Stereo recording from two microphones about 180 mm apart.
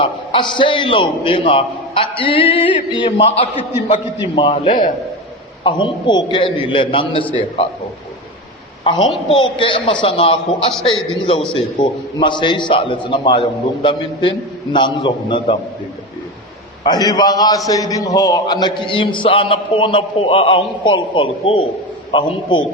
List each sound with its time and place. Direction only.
0.0 s a man's voice: 30° left (ahead or behind)
8.8 s a woman's voice: 25° left (ahead or behind)
16.8 s a man's voice: 20° left (ahead or behind)